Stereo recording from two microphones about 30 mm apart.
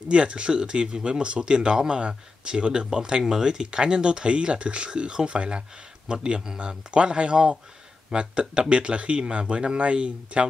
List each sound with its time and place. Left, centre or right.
0.1 s speech: right
6.6 s speech: right